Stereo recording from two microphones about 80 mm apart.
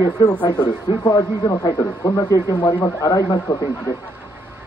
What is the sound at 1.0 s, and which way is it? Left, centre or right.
Speech, left.